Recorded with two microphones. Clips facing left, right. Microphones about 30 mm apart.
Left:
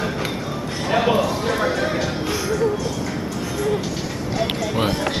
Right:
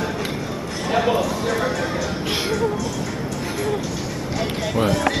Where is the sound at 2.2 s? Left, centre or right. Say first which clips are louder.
Even; right.